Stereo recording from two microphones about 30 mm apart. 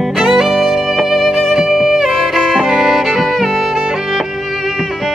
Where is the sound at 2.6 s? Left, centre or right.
Centre.